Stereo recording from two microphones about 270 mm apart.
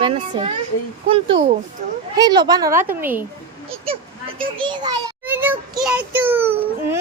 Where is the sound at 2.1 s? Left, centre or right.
Centre.